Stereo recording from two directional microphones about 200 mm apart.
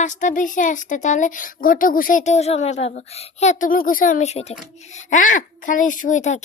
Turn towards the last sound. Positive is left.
turn(degrees=40)  # may be behind; listen again after turning